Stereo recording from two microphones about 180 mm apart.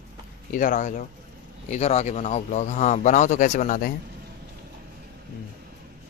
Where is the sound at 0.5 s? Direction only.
45° left (ahead or behind).